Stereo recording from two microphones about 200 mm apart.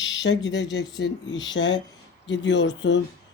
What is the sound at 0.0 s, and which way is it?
Speech, 65° left (ahead or behind).